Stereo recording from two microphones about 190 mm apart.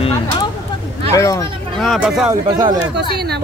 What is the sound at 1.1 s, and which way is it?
Speech, 15° left (ahead or behind).